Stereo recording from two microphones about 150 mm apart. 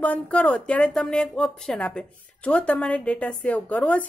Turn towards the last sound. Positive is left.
turn(degrees=10)  # may be behind; listen again after turning